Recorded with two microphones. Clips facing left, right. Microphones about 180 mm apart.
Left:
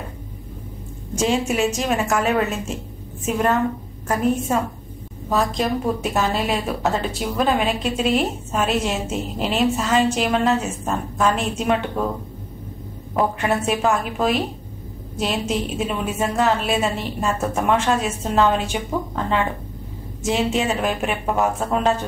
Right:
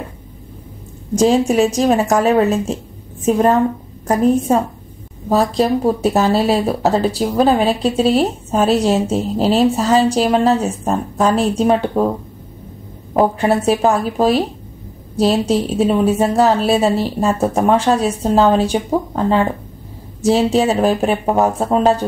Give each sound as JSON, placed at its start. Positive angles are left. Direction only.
{"t": 1.1, "sound": "speech", "side_deg": -35}
{"t": 13.1, "sound": "speech", "side_deg": -35}